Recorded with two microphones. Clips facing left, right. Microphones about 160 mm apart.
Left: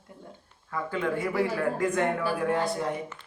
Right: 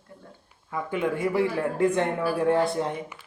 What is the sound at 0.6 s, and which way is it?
Speech, 20° right (ahead or behind).